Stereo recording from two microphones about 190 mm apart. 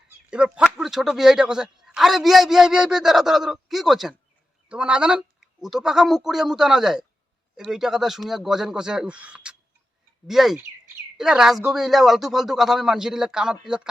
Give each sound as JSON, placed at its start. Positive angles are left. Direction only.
{"t": 0.3, "sound": "speech", "side_deg": -5}